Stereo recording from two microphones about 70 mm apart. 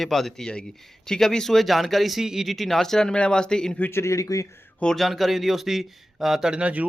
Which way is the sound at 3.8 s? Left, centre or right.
Left.